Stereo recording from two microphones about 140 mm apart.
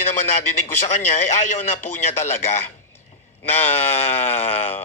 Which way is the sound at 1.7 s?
55° left (ahead or behind).